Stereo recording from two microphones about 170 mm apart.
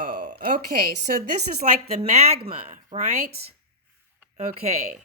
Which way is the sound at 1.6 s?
40° right (ahead or behind).